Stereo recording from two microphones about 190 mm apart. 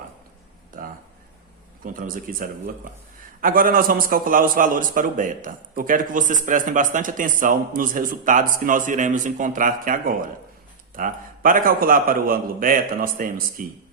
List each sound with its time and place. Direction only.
1.8 s a man's voice: 45° right (ahead or behind)